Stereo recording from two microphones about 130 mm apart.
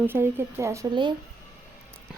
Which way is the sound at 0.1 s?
15° right (ahead or behind).